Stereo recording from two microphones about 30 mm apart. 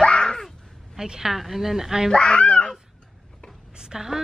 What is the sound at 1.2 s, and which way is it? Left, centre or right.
Speech, centre.